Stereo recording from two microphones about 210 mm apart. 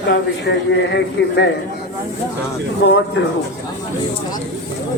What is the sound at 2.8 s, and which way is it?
Speech, 60° left (ahead or behind).